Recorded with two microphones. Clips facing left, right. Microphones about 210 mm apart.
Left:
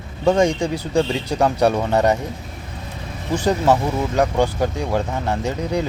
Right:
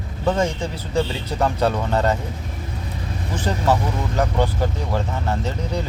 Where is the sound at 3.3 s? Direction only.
15° left (ahead or behind).